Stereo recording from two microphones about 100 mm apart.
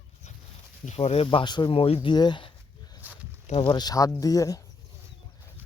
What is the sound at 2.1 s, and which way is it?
Speech, 50° left (ahead or behind).